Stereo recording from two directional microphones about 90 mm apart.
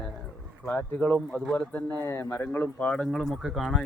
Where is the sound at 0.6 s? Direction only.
15° left (ahead or behind).